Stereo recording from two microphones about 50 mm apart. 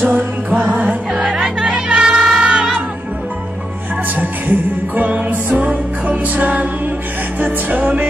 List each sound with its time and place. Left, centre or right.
0.0 s music: right
0.5 s music: right
4.1 s music: right